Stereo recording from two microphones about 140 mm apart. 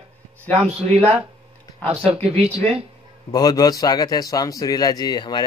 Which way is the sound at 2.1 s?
45° right (ahead or behind).